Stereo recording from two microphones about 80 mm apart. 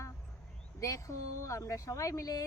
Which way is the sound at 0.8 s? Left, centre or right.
Left.